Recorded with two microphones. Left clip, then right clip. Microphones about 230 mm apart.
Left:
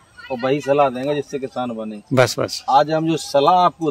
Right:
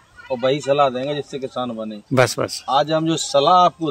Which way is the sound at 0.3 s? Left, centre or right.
Centre.